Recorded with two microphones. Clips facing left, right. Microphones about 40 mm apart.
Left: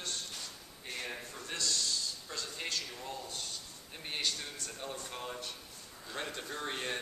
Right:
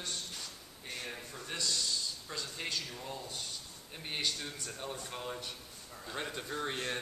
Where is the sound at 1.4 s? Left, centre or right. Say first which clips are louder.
Even; centre.